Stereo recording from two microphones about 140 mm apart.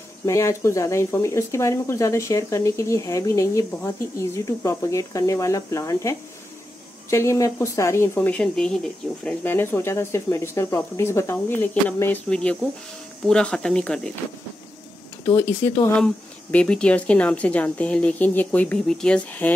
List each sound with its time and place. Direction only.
0.2 s speech: 20° left (ahead or behind); by 14.1 s 5° left (ahead or behind)
15.2 s speech: 20° left (ahead or behind)